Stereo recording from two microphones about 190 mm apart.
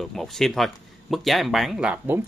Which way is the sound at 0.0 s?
Centre (ahead or behind).